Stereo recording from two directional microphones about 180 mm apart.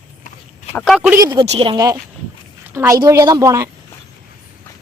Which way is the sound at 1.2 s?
20° right (ahead or behind).